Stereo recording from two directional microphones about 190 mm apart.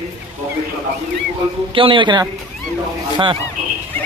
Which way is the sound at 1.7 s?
25° right (ahead or behind).